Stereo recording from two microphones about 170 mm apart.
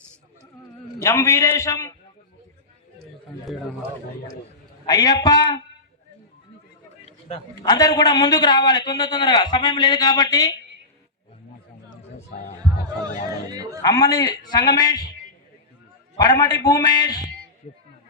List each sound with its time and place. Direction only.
1.0 s a man's voice: 20° left (ahead or behind)
3.5 s speech: centre (ahead or behind)
4.9 s a man's voice: 20° left (ahead or behind)
7.6 s a man's voice: 20° left (ahead or behind)
13.5 s a sound: 20° right (ahead or behind)
13.8 s a man's voice: 20° left (ahead or behind)
16.1 s a man's voice: 20° left (ahead or behind)